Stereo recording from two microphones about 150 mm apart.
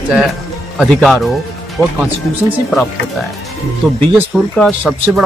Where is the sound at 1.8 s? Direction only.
15° left (ahead or behind).